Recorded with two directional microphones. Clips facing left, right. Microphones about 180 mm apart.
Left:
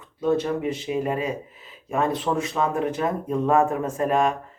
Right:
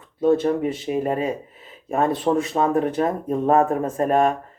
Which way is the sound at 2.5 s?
40° right (ahead or behind).